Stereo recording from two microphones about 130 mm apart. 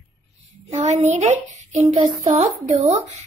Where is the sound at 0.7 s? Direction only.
60° right (ahead or behind).